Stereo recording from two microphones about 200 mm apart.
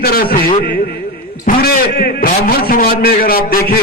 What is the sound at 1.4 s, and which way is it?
A man's voice, 50° left (ahead or behind).